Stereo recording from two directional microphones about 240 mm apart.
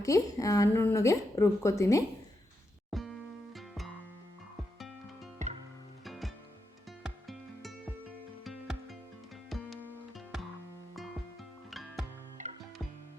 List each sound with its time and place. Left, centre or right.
0.0 s a woman's voice: centre
2.9 s music: centre
6.1 s music: centre
11.7 s music: centre
12.4 s music: right